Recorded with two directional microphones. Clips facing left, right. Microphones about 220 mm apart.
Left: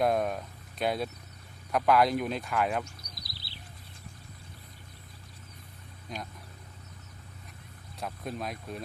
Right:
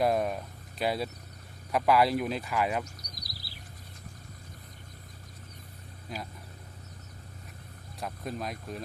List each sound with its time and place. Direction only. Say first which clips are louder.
0.0 s a sound: even; centre (ahead or behind)
1.7 s speech: even; centre (ahead or behind)
3.2 s chirp: right 1 dB; 25° left (ahead or behind)
6.1 s speech: even; 5° right (ahead or behind)
7.9 s speech: even; centre (ahead or behind)